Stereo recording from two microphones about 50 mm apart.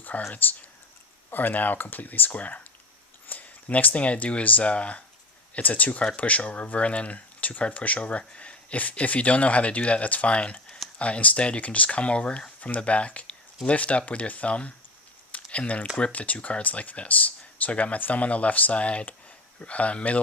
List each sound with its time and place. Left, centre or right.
0.1 s speech: left
1.3 s speech: left